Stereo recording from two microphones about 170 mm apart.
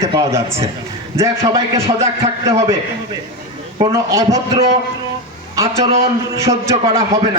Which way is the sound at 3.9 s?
20° right (ahead or behind).